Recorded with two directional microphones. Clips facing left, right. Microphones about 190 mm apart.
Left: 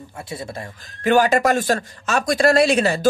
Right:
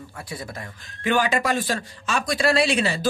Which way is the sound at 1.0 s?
45° left (ahead or behind).